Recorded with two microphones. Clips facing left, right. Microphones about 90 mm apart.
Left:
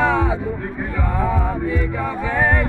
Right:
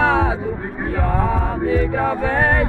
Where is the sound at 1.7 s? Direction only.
60° right (ahead or behind).